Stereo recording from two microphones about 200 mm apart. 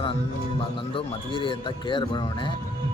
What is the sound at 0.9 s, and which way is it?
Speech, 25° left (ahead or behind).